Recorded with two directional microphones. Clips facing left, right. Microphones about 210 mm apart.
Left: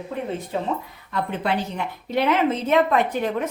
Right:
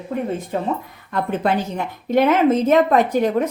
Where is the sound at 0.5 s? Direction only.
50° right (ahead or behind).